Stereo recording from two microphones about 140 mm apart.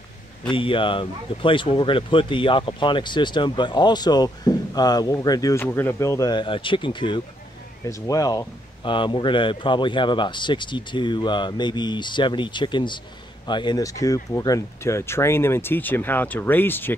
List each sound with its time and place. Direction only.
0.5 s speech: 40° left (ahead or behind); by 16.9 s 15° left (ahead or behind)